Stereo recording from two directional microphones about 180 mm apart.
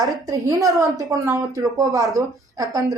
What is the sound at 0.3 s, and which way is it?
A woman's voice, 20° right (ahead or behind).